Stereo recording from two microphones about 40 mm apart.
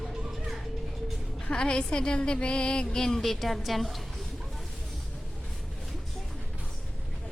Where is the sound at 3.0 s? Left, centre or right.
Centre.